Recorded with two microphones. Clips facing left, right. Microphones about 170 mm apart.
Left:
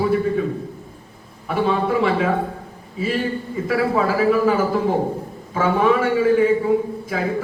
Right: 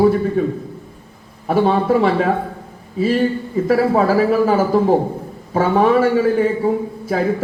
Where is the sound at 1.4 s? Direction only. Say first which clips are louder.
Right 5 dB; 40° right (ahead or behind).